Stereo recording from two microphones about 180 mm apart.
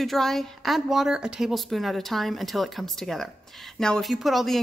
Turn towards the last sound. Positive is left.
turn(degrees=0)  # may be behind; listen again after turning